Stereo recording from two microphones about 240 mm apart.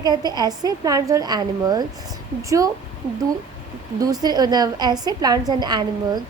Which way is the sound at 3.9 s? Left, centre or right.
Centre.